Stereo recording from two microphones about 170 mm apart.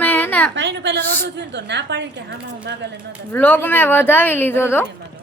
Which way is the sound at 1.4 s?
90° right.